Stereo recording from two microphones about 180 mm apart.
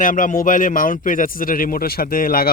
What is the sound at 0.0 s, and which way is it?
A man's voice, 50° left (ahead or behind).